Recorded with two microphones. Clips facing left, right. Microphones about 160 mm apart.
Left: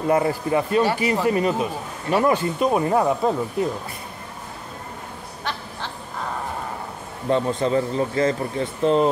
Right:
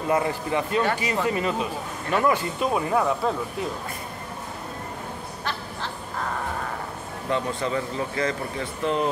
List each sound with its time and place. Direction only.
0.1 s speech: 30° left (ahead or behind)
7.2 s speech: 35° left (ahead or behind)